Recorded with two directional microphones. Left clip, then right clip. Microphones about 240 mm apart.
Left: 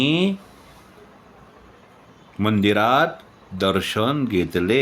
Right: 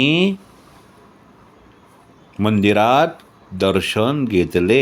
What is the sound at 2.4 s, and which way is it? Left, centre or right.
Speech, centre.